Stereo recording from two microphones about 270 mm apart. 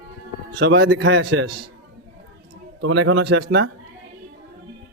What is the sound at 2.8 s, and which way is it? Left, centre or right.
Speech, right.